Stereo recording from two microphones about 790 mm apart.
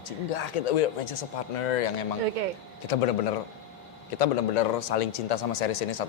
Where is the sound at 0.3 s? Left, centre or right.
Left.